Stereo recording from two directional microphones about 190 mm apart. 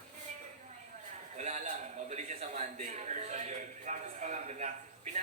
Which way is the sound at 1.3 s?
35° right (ahead or behind).